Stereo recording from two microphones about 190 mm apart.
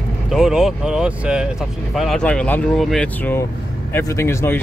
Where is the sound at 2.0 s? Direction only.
5° left (ahead or behind).